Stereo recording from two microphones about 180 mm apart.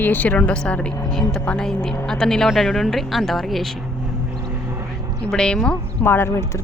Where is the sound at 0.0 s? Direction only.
10° left (ahead or behind).